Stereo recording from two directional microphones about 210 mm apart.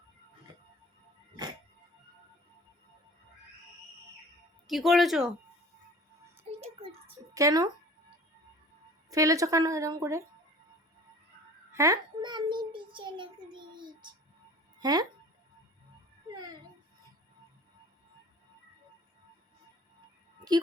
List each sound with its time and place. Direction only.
4.6 s speech: centre (ahead or behind)
6.5 s a sound: 30° right (ahead or behind)
7.3 s a woman's voice: 15° right (ahead or behind)
9.0 s a woman's voice: 15° right (ahead or behind)
11.7 s child singing: 15° right (ahead or behind)
14.8 s speech: 20° right (ahead or behind)
16.3 s a sound: 15° right (ahead or behind)